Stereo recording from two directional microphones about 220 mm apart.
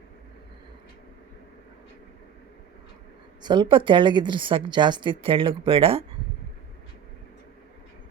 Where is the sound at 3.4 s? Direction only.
20° right (ahead or behind).